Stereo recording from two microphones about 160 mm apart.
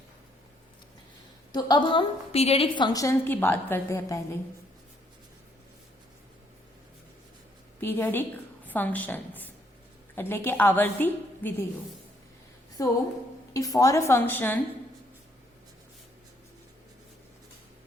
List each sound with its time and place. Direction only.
1.5 s a woman's voice: 25° left (ahead or behind)
7.8 s a woman's voice: 15° left (ahead or behind)
12.8 s a woman's voice: 20° left (ahead or behind)